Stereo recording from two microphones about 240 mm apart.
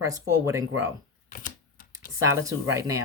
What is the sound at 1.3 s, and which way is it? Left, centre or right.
Typewriter, left.